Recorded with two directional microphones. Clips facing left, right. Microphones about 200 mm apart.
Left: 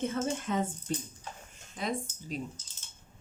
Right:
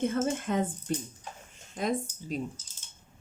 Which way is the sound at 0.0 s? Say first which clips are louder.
Right 3 dB; 55° right (ahead or behind).